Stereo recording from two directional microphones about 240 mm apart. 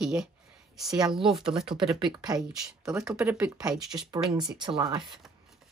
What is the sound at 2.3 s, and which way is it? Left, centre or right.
Speech, centre.